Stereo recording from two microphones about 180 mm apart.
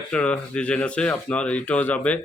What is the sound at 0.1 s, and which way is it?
Speech, 5° left (ahead or behind).